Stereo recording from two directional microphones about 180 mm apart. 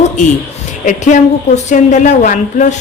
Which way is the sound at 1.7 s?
40° left (ahead or behind).